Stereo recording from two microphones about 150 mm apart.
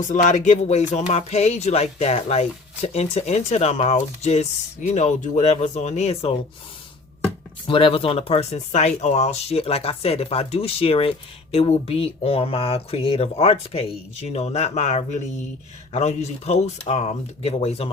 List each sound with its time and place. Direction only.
0.0 s speech: 55° left (ahead or behind)
7.7 s speech: 35° left (ahead or behind)